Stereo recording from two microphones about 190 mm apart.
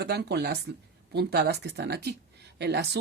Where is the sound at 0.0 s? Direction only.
60° right (ahead or behind).